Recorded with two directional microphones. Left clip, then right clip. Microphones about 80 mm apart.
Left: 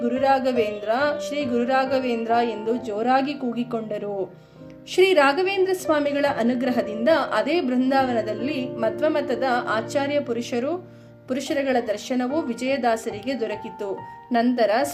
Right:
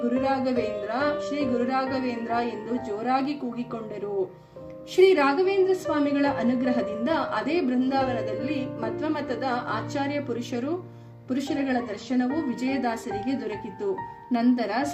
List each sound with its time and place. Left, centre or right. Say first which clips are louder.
0.0 s a sound: left 5 dB; left
0.6 s a woman's voice: left 5 dB; left
4.9 s a woman's voice: left 2 dB; left